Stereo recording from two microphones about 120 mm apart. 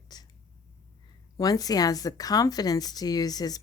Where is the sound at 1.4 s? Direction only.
30° left (ahead or behind).